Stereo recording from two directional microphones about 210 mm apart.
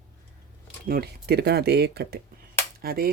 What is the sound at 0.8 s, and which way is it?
Speech, 50° right (ahead or behind).